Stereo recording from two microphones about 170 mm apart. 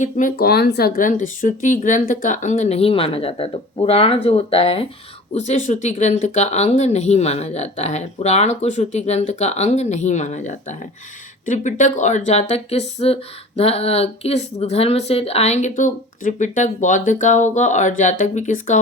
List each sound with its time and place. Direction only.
0.0 s speech: 50° left (ahead or behind)